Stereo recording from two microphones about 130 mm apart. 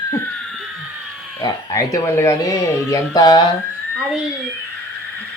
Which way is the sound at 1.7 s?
20° left (ahead or behind).